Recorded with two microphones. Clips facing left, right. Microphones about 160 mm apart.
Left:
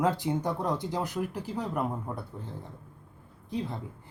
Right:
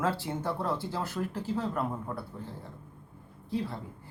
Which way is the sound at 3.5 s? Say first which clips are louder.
Right 1 dB; 20° left (ahead or behind).